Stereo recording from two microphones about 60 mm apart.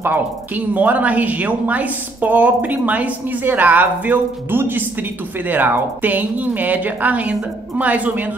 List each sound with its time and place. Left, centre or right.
0.0 s speech: right